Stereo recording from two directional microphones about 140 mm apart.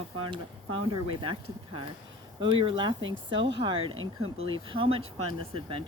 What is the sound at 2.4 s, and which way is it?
Speech, 35° right (ahead or behind).